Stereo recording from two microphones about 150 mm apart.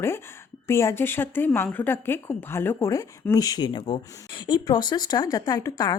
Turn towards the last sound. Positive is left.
turn(degrees=25)  # may be behind; listen again after turning